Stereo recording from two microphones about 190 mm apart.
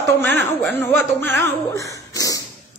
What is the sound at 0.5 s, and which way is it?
Speech, 10° left (ahead or behind).